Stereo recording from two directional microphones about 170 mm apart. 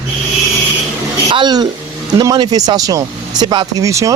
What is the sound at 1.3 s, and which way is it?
A man's voice, 25° right (ahead or behind).